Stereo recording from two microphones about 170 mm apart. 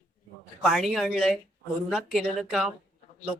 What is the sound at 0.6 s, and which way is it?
A woman's voice, centre (ahead or behind).